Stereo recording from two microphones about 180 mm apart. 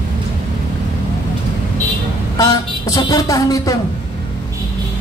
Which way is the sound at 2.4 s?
20° left (ahead or behind).